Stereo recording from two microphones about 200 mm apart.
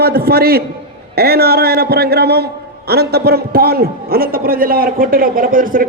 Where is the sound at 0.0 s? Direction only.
50° right (ahead or behind).